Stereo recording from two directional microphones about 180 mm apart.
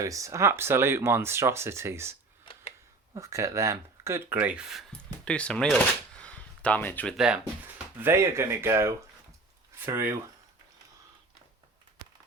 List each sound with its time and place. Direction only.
0.0 s speech: 15° right (ahead or behind)
2.4 s tick: 30° left (ahead or behind)
3.2 s speech: 15° right (ahead or behind); by 7.2 s 10° left (ahead or behind)
7.2 s speech: 5° right (ahead or behind)